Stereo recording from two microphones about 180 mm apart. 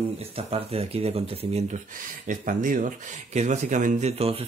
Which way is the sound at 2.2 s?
50° right (ahead or behind).